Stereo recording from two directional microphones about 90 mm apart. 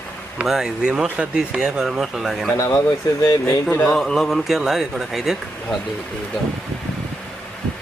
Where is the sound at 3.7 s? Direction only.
25° left (ahead or behind).